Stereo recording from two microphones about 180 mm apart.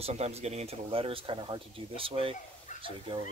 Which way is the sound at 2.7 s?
40° left (ahead or behind).